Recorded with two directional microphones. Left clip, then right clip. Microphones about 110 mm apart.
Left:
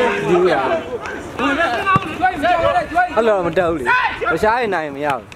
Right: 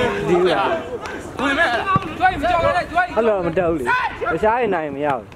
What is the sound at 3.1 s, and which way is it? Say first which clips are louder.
Speech: left 3 dB; 25° left (ahead or behind).